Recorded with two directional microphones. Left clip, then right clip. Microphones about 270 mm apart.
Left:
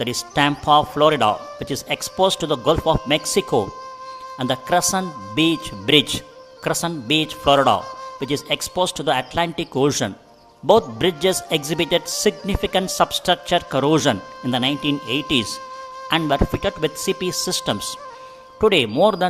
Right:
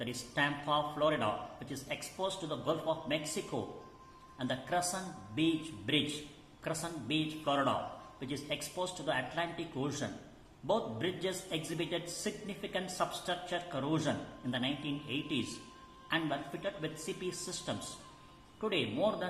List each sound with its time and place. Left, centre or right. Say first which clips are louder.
0.0 s a man's voice: left 15 dB; left